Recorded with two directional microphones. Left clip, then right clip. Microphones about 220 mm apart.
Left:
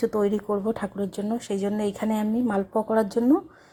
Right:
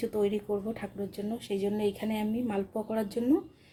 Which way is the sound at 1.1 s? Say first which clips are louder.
Left 3 dB; 20° left (ahead or behind).